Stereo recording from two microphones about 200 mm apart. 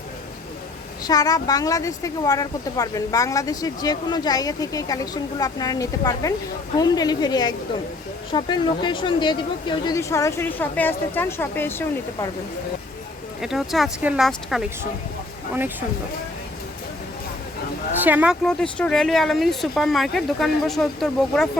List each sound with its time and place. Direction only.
1.0 s speech: 20° left (ahead or behind)
13.4 s speech: centre (ahead or behind)
18.0 s speech: 10° right (ahead or behind)
18.4 s speech: 5° left (ahead or behind)